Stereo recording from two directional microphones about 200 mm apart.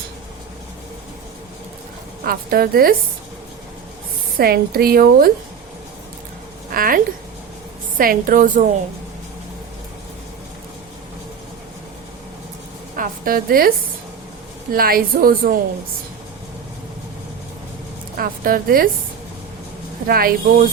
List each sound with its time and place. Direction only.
2.2 s a woman's voice: 45° right (ahead or behind)
4.4 s a woman's voice: 50° right (ahead or behind)
6.7 s a woman's voice: 45° right (ahead or behind)
13.0 s a woman's voice: 45° right (ahead or behind)
18.2 s a woman's voice: 45° right (ahead or behind)
20.1 s a woman's voice: 50° right (ahead or behind)